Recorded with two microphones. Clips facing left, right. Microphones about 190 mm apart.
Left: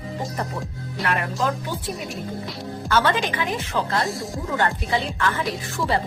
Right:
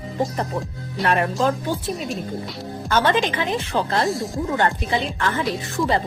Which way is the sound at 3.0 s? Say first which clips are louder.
Right 2 dB; 20° right (ahead or behind).